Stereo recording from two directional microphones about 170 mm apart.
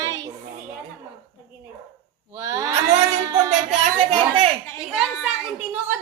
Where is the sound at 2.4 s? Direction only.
20° right (ahead or behind).